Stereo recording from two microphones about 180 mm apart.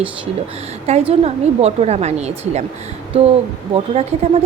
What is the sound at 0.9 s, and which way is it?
A woman's voice, 35° right (ahead or behind).